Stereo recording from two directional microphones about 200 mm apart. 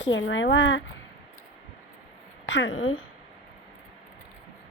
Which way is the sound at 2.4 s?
70° left (ahead or behind).